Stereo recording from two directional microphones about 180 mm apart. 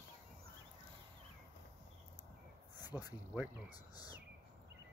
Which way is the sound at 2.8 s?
10° right (ahead or behind).